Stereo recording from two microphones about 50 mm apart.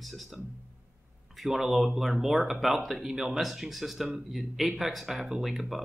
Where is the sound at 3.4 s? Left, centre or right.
Centre.